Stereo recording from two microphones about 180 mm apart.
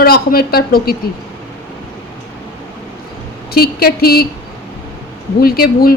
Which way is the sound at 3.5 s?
60° left (ahead or behind).